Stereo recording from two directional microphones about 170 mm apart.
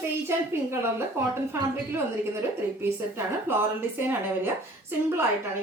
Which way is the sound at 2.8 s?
15° right (ahead or behind).